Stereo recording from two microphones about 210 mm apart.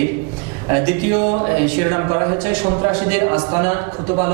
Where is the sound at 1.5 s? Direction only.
15° right (ahead or behind).